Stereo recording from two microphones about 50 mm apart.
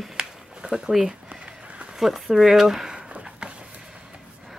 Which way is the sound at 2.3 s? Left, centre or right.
Centre.